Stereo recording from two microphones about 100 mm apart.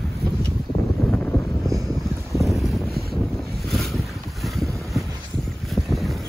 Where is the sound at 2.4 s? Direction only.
Centre (ahead or behind).